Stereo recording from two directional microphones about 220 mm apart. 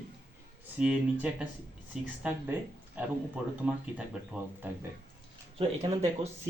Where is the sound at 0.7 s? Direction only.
5° right (ahead or behind).